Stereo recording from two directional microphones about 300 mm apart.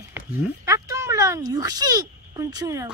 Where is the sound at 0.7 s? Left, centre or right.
Centre.